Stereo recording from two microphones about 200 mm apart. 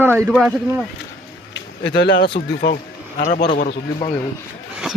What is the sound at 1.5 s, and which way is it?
Speech, 60° left (ahead or behind).